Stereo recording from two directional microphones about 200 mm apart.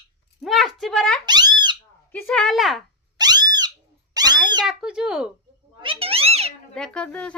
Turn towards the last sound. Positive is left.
turn(degrees=5)  # may be behind; listen again after turning